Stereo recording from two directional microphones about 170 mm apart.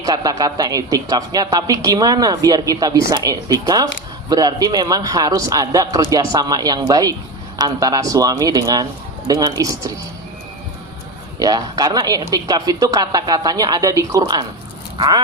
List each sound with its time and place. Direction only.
0.0 s a man's voice: 20° right (ahead or behind)
11.3 s a man's voice: 20° right (ahead or behind)
14.9 s dog: 20° right (ahead or behind)